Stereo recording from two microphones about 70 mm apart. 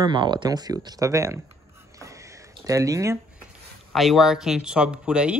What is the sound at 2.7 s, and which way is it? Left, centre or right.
Speech, right.